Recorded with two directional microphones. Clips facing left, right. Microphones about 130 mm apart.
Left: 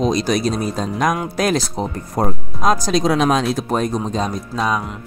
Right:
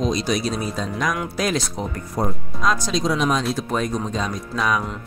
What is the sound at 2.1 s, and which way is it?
Speech, 50° left (ahead or behind).